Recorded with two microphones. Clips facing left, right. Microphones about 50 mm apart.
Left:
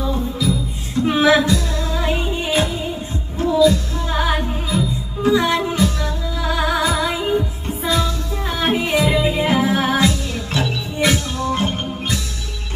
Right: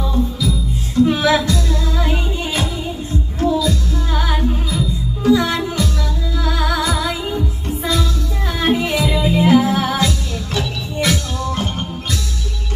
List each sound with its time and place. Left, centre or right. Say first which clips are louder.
0.0 s music: right 1 dB; centre
3.4 s music: left 3 dB; left